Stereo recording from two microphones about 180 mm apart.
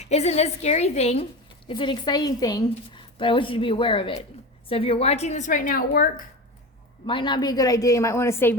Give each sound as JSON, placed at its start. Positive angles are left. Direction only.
{"t": 0.0, "sound": "a woman's voice", "side_deg": 35}
{"t": 7.1, "sound": "a woman's voice", "side_deg": 25}